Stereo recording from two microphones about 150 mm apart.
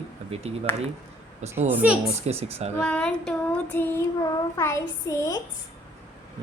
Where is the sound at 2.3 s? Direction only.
45° right (ahead or behind).